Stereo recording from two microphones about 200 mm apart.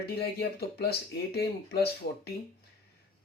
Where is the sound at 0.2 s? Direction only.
55° left (ahead or behind).